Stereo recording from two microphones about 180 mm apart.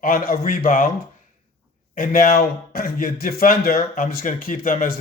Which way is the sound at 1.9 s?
50° left (ahead or behind).